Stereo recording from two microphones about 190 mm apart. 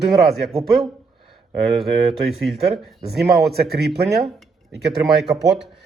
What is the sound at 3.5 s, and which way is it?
Speech, 55° right (ahead or behind).